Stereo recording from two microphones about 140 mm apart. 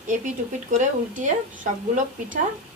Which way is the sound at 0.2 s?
65° right (ahead or behind).